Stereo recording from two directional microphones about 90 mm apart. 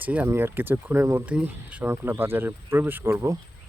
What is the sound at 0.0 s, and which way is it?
Speech, 20° right (ahead or behind).